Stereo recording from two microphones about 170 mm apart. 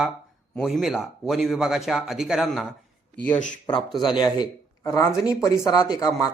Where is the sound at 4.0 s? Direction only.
25° left (ahead or behind).